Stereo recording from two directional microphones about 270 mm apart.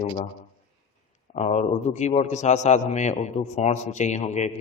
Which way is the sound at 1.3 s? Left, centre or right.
Left.